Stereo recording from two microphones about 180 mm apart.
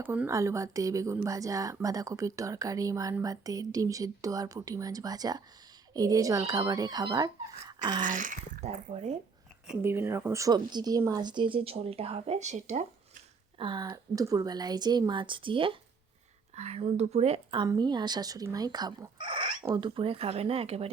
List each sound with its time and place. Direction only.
0.0 s a woman's voice: 10° right (ahead or behind)
7.7 s a sound: 20° right (ahead or behind)
8.0 s speech: 45° right (ahead or behind)
9.8 s a woman's voice: 15° right (ahead or behind); by 12.8 s 40° right (ahead or behind)
13.6 s a woman's voice: 25° right (ahead or behind)